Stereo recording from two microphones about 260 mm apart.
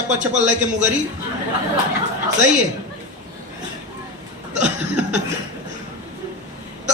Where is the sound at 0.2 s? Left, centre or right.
Right.